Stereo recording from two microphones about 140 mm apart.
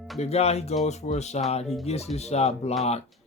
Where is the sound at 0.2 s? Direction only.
50° left (ahead or behind).